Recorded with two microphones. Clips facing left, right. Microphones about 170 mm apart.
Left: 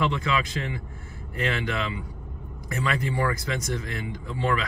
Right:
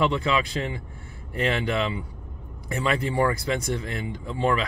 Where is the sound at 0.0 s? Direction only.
30° right (ahead or behind).